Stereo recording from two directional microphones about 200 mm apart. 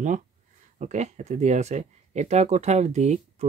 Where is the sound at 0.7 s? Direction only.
35° right (ahead or behind).